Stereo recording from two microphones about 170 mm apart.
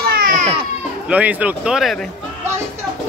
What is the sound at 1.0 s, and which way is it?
Speech, 10° right (ahead or behind).